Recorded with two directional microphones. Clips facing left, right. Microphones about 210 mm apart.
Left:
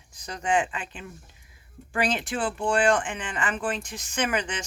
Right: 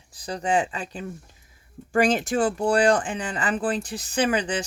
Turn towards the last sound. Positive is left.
turn(degrees=-35)  # may be behind; listen again after turning